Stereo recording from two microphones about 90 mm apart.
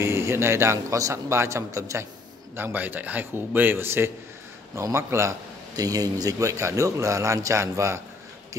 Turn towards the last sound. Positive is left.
turn(degrees=-30)  # may be behind; listen again after turning